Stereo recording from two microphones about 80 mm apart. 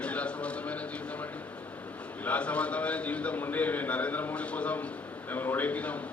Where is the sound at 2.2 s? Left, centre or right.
Centre.